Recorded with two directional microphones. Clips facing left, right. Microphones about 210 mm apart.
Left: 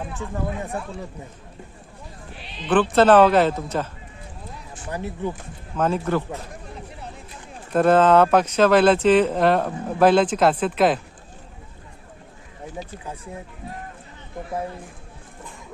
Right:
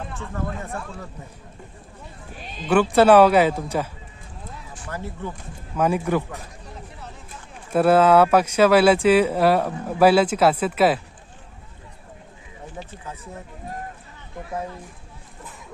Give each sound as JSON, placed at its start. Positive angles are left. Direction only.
{"t": 2.3, "sound": "bleat", "side_deg": -45}
{"t": 2.6, "sound": "speech", "side_deg": -10}
{"t": 4.7, "sound": "speech", "side_deg": 15}
{"t": 5.7, "sound": "speech", "side_deg": -10}
{"t": 7.7, "sound": "speech", "side_deg": -10}
{"t": 12.8, "sound": "speech", "side_deg": 15}